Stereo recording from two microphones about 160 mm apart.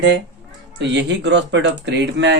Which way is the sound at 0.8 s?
90° right.